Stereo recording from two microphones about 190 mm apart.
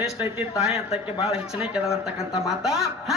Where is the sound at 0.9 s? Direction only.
35° left (ahead or behind).